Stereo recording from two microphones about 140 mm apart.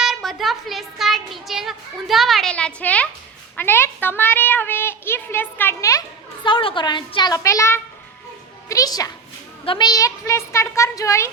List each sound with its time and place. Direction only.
0.0 s child singing: centre (ahead or behind)
3.6 s a child's voice: 15° left (ahead or behind)
6.4 s a woman's voice: 35° left (ahead or behind); by 11.3 s 20° left (ahead or behind)